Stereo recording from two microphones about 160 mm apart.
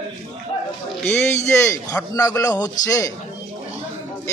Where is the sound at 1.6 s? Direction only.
20° left (ahead or behind).